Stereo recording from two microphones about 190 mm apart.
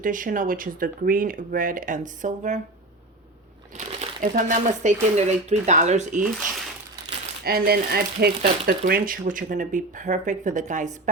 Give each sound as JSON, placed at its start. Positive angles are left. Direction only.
{"t": 0.0, "sound": "speech", "side_deg": -45}
{"t": 3.8, "sound": "speech", "side_deg": -40}
{"t": 7.4, "sound": "speech", "side_deg": -50}